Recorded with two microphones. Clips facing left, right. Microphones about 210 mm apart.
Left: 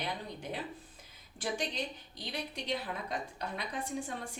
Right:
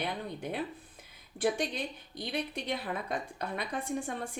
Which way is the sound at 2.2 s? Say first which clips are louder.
Right 5 dB; 55° right (ahead or behind).